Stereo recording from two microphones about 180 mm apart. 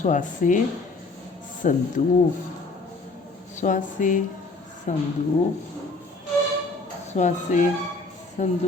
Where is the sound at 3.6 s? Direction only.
45° left (ahead or behind).